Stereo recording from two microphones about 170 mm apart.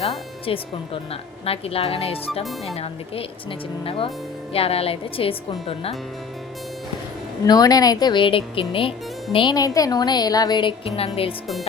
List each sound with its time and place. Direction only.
1.1 s a woman's voice: 35° left (ahead or behind)
2.4 s speech: centre (ahead or behind)
2.7 s a woman's voice: 35° left (ahead or behind)
7.4 s speech: 20° left (ahead or behind)